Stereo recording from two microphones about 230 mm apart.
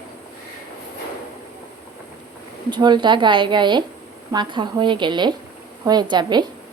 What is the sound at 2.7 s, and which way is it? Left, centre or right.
Speech, centre.